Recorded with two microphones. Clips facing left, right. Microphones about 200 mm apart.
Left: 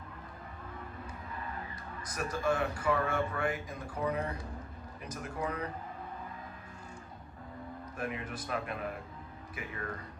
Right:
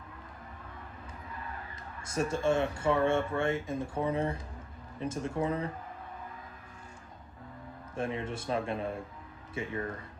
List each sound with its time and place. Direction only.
2.0 s speech: 25° right (ahead or behind)
7.9 s speech: 25° right (ahead or behind)